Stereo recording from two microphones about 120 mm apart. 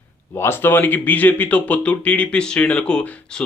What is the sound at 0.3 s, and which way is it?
Speech, 20° left (ahead or behind).